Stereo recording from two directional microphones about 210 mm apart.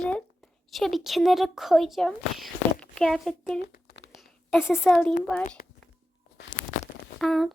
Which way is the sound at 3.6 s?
50° left (ahead or behind).